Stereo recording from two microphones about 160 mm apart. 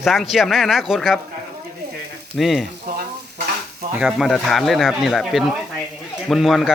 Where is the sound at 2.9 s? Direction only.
70° right (ahead or behind).